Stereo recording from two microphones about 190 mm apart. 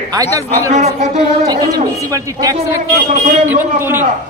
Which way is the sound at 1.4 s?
20° right (ahead or behind).